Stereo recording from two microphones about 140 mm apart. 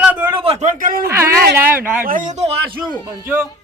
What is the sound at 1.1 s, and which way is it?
Speech, 20° right (ahead or behind).